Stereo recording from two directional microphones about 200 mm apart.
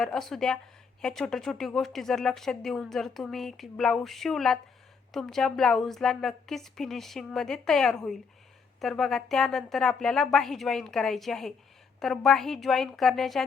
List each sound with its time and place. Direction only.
0.0 s speech: centre (ahead or behind)